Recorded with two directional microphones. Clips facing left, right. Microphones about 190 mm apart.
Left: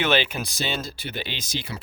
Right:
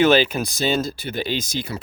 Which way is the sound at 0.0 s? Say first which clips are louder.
Right 7 dB; 40° right (ahead or behind).